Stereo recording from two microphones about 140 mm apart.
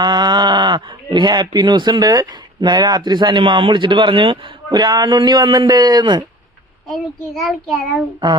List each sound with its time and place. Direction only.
0.0 s speech: 30° right (ahead or behind)
7.3 s a child's voice: centre (ahead or behind)